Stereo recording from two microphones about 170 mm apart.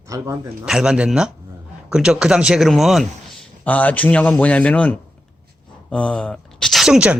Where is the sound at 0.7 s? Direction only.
5° right (ahead or behind).